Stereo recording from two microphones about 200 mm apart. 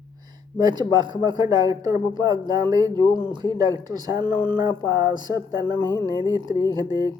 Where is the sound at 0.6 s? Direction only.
20° right (ahead or behind).